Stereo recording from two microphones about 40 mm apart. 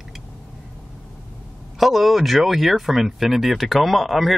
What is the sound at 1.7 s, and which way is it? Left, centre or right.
Speech, centre.